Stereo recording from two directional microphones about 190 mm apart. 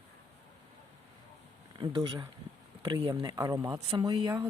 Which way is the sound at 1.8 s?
25° right (ahead or behind).